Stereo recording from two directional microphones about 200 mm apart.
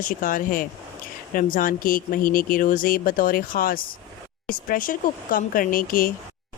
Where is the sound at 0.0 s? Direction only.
45° left (ahead or behind).